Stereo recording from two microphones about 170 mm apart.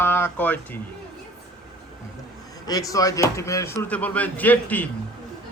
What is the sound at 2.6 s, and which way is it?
Speech, 20° left (ahead or behind).